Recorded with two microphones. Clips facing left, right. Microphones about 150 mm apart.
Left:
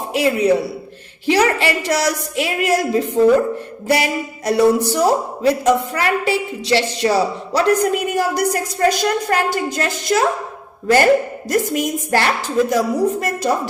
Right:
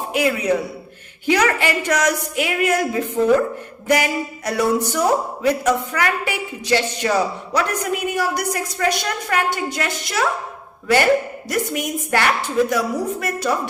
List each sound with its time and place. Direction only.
0.1 s a woman's voice: 30° left (ahead or behind)